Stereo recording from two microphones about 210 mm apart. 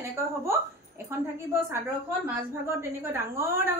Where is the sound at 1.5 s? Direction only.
10° right (ahead or behind).